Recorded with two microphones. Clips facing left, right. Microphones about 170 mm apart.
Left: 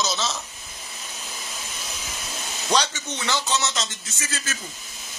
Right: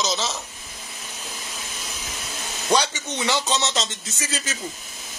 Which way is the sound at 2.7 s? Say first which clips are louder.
Right 2 dB; 15° right (ahead or behind).